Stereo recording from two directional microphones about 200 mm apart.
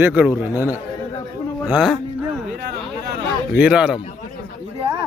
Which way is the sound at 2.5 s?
55° right (ahead or behind).